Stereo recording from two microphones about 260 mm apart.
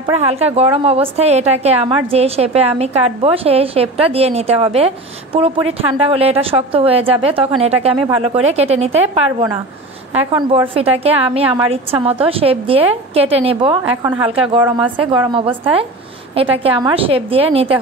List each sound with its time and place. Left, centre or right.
0.2 s a woman's voice: right
10.1 s a woman's voice: centre